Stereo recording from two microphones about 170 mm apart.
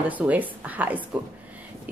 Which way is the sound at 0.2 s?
10° right (ahead or behind).